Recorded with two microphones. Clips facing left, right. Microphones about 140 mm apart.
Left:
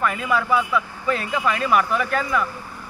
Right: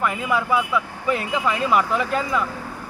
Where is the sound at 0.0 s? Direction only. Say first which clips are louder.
Even; 20° right (ahead or behind).